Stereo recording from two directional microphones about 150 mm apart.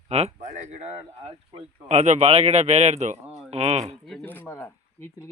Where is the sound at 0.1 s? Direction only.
45° right (ahead or behind).